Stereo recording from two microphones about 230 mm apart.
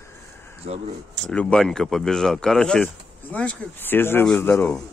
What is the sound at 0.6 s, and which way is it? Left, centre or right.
Speech, right.